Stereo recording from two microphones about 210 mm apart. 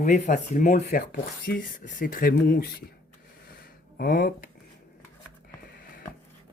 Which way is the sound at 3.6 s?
45° left (ahead or behind).